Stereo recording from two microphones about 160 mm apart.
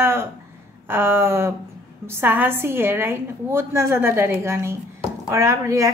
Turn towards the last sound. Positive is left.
turn(degrees=-20)  # may be behind; listen again after turning